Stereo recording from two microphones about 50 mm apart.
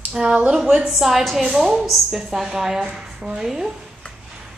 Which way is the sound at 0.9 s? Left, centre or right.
Centre.